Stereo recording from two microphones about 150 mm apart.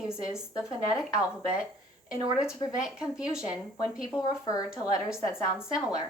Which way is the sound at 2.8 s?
5° right (ahead or behind).